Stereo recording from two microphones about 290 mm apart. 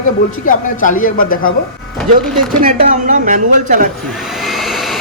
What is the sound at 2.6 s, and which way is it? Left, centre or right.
A man's voice, right.